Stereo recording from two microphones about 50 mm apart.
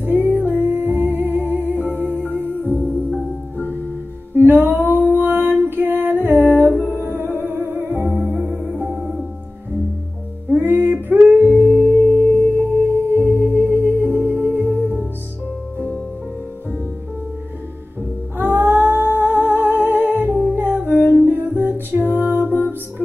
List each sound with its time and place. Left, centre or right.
0.0 s music: right
2.8 s music: left
3.5 s music: right
8.1 s music: right
10.6 s music: right
12.3 s singing bowl: left
13.3 s music: right
18.4 s music: right